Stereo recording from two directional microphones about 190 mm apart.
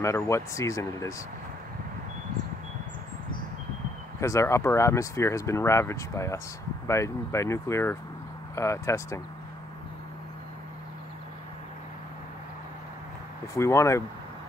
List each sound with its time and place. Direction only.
0.0 s speech: 15° left (ahead or behind)
4.2 s speech: 15° left (ahead or behind)
13.6 s speech: 15° left (ahead or behind)